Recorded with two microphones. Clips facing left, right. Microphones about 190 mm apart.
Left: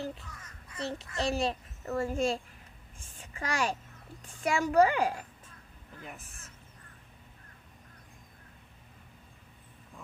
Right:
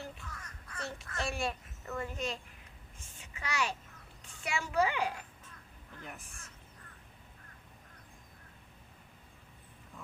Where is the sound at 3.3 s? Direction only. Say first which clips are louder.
Left 4 dB; 45° left (ahead or behind).